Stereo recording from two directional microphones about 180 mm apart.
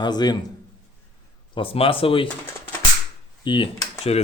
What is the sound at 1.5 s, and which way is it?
Speech, 30° left (ahead or behind).